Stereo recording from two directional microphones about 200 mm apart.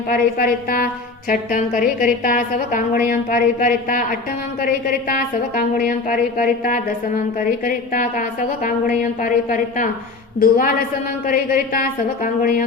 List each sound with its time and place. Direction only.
0.1 s a woman's voice: 45° left (ahead or behind)